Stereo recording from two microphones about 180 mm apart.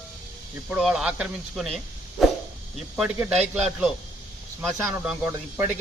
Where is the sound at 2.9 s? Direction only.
5° right (ahead or behind).